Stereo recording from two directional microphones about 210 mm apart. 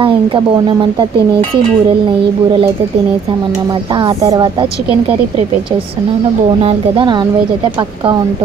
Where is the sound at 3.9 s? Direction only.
20° right (ahead or behind).